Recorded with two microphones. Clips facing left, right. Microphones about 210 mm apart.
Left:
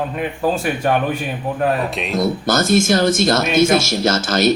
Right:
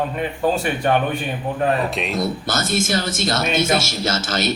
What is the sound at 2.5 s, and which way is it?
A man's voice, 45° left (ahead or behind).